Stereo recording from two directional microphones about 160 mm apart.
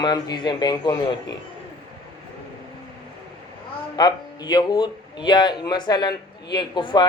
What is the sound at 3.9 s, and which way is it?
A man's voice, 25° left (ahead or behind).